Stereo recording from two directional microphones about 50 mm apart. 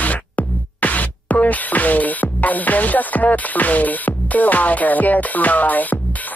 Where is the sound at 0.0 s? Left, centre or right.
Left.